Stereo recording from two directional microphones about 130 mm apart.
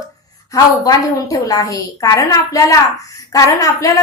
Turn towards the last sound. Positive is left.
turn(degrees=25)  # may be behind; listen again after turning